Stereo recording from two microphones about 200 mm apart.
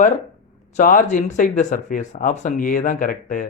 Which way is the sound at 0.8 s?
40° left (ahead or behind).